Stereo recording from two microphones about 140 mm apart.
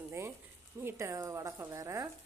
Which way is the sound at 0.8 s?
15° right (ahead or behind).